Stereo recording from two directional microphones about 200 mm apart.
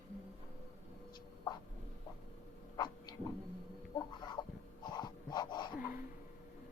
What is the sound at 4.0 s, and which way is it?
Chicken, 20° left (ahead or behind).